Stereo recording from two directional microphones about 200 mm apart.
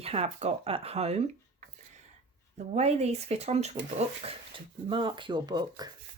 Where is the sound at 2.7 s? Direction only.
35° right (ahead or behind).